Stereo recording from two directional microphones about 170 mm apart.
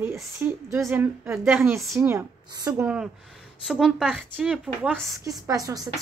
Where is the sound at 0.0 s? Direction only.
15° right (ahead or behind).